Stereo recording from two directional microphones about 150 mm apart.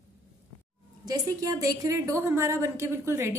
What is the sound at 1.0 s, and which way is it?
A woman's voice, 25° right (ahead or behind).